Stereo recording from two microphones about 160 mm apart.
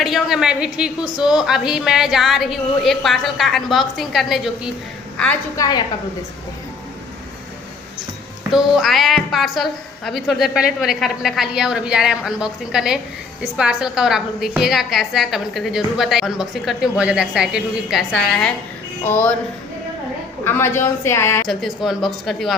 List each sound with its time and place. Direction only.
0.0 s a woman's voice: centre (ahead or behind)
5.5 s a woman's voice: 25° left (ahead or behind)
8.5 s a woman's voice: centre (ahead or behind)
19.0 s a woman's voice: 10° left (ahead or behind)
20.4 s a woman's voice: 15° left (ahead or behind)
21.4 s a woman's voice: centre (ahead or behind)